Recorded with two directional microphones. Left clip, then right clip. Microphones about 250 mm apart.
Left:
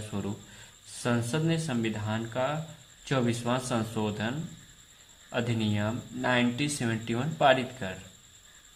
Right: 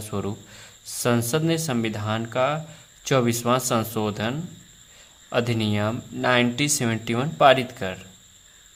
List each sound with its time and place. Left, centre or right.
0.1 s speech: right